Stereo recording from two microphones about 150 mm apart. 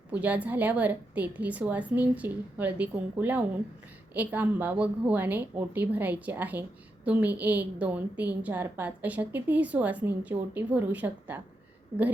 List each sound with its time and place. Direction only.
0.1 s a woman's voice: 10° right (ahead or behind)